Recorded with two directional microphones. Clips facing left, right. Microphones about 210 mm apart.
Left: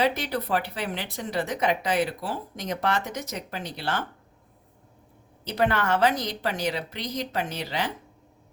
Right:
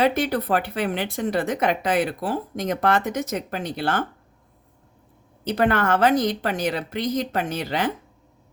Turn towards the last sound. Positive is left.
turn(degrees=-50)  # may be behind; listen again after turning